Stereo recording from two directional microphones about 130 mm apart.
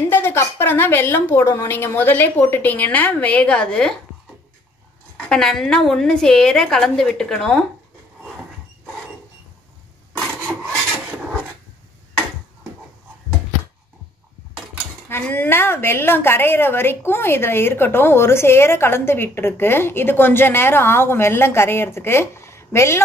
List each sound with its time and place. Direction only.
0.1 s a woman's voice: 15° left (ahead or behind)
5.1 s a woman's voice: 5° left (ahead or behind)
15.0 s a woman's voice: 15° left (ahead or behind)